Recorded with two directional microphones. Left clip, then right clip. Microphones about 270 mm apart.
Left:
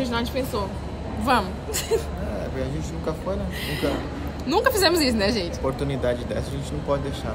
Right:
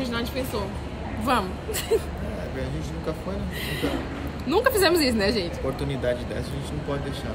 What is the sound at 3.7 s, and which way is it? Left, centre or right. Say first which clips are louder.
A woman's voice: left 2 dB; centre.